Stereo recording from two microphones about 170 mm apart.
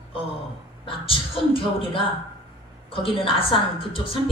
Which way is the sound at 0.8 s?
30° left (ahead or behind).